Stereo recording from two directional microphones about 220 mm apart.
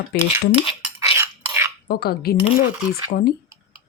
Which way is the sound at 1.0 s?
10° right (ahead or behind).